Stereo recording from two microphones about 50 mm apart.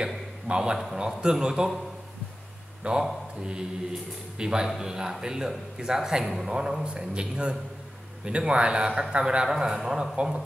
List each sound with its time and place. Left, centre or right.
0.0 s a sound: centre
0.9 s a man's voice: centre
2.8 s a man's voice: centre